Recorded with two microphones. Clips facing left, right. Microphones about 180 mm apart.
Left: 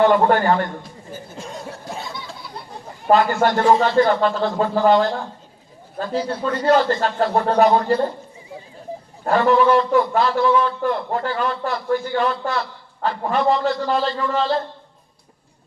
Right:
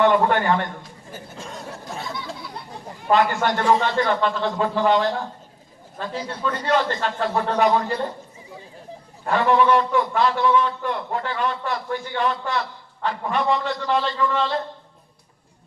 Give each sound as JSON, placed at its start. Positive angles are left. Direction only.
{"t": 0.0, "sound": "a man's voice", "side_deg": 35}
{"t": 3.1, "sound": "a man's voice", "side_deg": 35}
{"t": 9.2, "sound": "a man's voice", "side_deg": 40}